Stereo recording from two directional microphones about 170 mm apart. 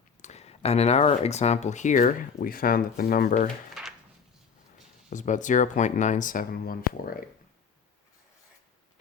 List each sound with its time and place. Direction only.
0.2 s speech: 40° left (ahead or behind)
5.0 s speech: 45° left (ahead or behind)